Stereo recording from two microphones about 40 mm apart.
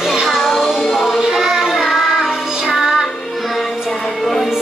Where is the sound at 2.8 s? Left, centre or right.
Centre.